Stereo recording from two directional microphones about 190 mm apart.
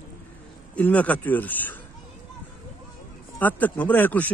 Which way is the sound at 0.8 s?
10° left (ahead or behind).